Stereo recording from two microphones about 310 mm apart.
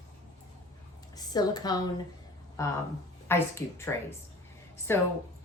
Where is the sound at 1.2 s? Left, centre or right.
Centre.